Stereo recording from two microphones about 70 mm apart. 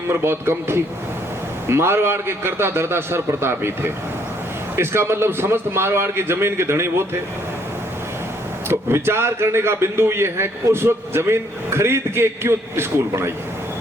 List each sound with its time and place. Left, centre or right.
0.1 s a man's voice: right
8.7 s a man's voice: right